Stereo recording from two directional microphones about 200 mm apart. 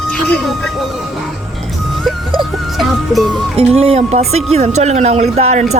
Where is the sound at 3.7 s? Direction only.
30° right (ahead or behind).